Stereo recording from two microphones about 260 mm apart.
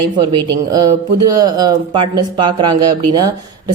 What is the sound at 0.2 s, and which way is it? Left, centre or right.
Speech, centre.